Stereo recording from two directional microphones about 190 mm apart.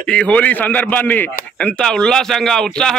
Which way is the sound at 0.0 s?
5° left (ahead or behind).